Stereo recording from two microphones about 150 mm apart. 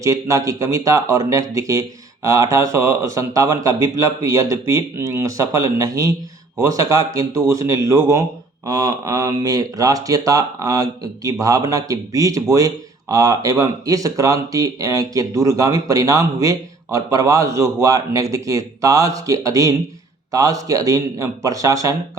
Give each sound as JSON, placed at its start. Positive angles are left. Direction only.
{"t": 0.0, "sound": "speech", "side_deg": -20}